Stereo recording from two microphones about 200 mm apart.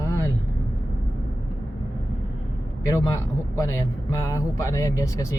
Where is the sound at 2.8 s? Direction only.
15° left (ahead or behind).